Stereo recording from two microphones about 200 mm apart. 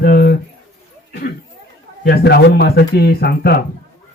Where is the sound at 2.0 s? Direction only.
55° left (ahead or behind).